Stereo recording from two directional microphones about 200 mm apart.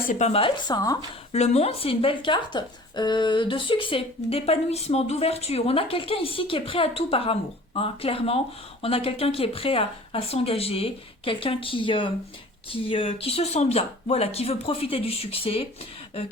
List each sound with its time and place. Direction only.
0.0 s speech: 35° left (ahead or behind); by 0.9 s 20° left (ahead or behind)
1.3 s speech: 35° left (ahead or behind)